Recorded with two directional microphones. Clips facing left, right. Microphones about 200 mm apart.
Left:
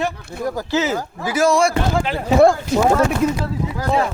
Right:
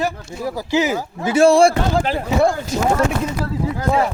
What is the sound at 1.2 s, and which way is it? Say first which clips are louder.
Speech: right 5 dB; 30° right (ahead or behind).